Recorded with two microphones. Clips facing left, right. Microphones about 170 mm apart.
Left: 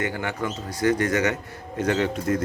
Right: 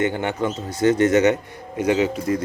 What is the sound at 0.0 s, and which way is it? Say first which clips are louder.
A man's voice: right 6 dB; 25° right (ahead or behind).